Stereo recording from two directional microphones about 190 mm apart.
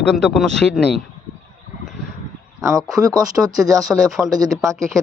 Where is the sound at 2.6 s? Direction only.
15° right (ahead or behind).